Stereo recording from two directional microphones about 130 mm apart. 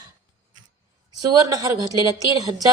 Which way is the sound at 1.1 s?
30° right (ahead or behind).